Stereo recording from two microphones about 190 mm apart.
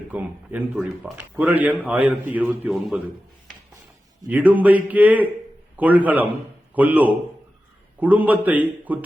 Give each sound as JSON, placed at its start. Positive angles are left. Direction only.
{"t": 0.1, "sound": "speech", "side_deg": -10}
{"t": 4.3, "sound": "speech", "side_deg": -10}